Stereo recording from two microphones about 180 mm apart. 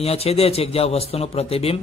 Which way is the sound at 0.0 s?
35° left (ahead or behind).